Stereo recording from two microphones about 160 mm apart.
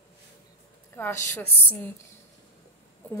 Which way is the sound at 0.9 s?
15° left (ahead or behind).